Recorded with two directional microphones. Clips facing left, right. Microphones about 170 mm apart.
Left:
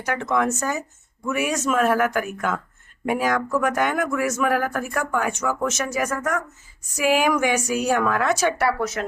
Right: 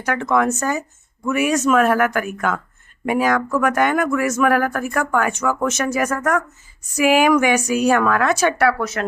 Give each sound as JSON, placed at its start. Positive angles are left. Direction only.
{"t": 0.0, "sound": "speech", "side_deg": -65}
{"t": 6.9, "sound": "speech", "side_deg": -80}